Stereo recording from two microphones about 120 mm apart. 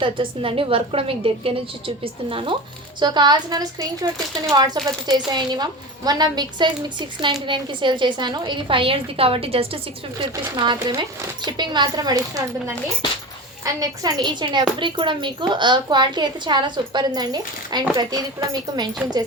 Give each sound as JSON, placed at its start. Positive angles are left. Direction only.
{"t": 0.0, "sound": "a woman's voice", "side_deg": -45}
{"t": 10.2, "sound": "speech", "side_deg": -40}
{"t": 13.7, "sound": "speech", "side_deg": -35}